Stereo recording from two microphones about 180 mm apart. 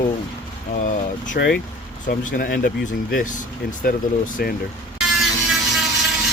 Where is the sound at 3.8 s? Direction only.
50° left (ahead or behind).